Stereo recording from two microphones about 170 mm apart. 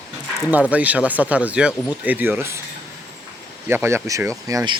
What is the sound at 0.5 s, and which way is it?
Speech, 10° right (ahead or behind).